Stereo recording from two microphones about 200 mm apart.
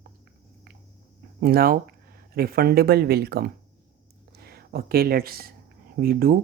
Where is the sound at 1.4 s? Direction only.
50° right (ahead or behind).